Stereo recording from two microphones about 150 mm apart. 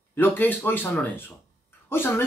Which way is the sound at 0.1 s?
15° left (ahead or behind).